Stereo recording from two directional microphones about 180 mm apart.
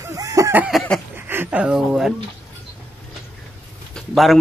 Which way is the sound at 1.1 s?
10° right (ahead or behind).